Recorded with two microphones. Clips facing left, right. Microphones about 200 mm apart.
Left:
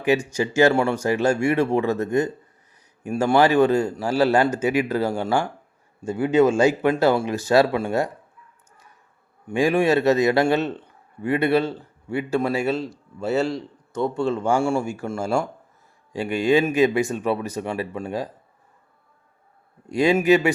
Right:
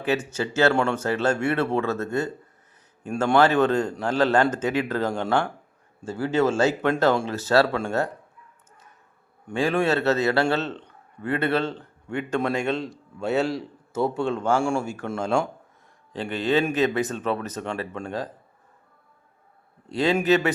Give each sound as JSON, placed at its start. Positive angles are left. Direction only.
{"t": 0.0, "sound": "a man's voice", "side_deg": 15}
{"t": 9.5, "sound": "a man's voice", "side_deg": 15}
{"t": 19.9, "sound": "a man's voice", "side_deg": 10}